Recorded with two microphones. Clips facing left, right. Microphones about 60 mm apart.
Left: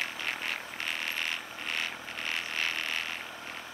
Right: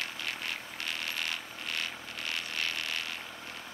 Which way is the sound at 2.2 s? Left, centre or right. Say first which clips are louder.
Left 2 dB; left.